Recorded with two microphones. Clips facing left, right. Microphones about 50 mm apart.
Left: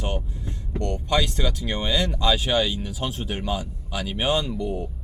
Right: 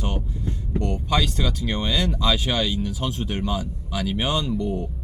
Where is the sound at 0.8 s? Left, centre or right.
Left.